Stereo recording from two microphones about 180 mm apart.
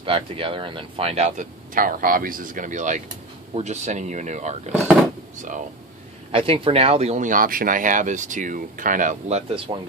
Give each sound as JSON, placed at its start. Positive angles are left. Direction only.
{"t": 0.0, "sound": "speech", "side_deg": -30}
{"t": 6.3, "sound": "speech", "side_deg": -30}
{"t": 9.7, "sound": "speech", "side_deg": -25}